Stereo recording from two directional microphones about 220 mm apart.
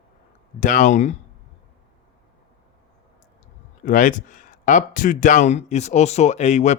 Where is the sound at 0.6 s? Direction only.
35° left (ahead or behind).